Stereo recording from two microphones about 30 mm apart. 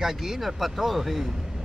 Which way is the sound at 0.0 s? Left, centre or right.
Centre.